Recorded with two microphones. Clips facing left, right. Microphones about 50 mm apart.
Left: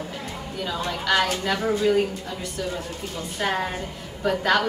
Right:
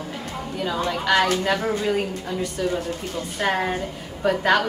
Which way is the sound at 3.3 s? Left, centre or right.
Centre.